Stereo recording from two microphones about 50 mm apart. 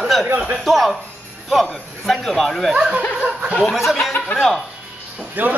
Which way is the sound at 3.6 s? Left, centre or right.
Centre.